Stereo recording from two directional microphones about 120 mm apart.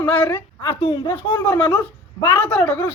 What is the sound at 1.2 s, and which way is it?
Speech, 40° left (ahead or behind).